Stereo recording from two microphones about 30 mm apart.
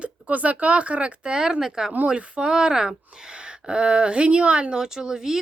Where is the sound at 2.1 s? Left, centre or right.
Right.